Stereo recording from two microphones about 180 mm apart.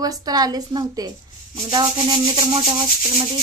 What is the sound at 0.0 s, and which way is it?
Speech, 20° right (ahead or behind).